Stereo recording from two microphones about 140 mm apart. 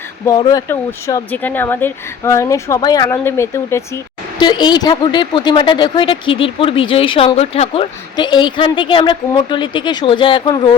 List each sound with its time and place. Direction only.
0.3 s speech: 30° left (ahead or behind)
4.4 s speech: 30° left (ahead or behind); by 7.9 s 45° left (ahead or behind)
8.1 s speech: 30° left (ahead or behind)